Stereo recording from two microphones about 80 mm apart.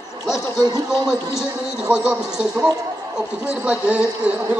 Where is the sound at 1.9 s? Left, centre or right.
Centre.